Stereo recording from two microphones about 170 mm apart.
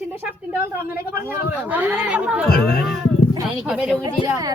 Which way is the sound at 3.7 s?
5° right (ahead or behind).